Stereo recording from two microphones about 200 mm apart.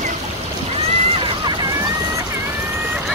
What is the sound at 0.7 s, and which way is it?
Boat, 25° right (ahead or behind).